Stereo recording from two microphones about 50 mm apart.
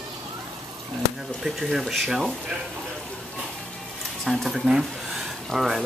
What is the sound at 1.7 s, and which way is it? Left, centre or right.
Speech, centre.